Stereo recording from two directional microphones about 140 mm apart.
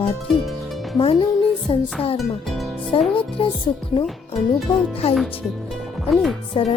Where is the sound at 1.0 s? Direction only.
40° left (ahead or behind).